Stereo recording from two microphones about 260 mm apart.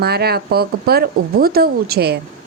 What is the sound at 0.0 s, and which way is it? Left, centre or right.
A woman's voice, right.